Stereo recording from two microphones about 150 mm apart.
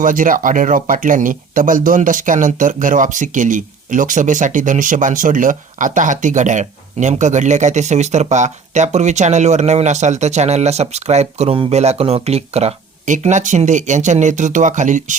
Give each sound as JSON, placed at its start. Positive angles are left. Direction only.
{"t": 0.0, "sound": "speech", "side_deg": -60}